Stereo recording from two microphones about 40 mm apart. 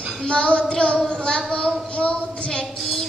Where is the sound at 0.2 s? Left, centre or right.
Left.